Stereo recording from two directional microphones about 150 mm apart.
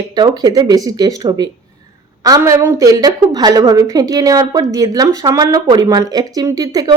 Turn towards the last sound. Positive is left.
turn(degrees=-25)  # may be behind; listen again after turning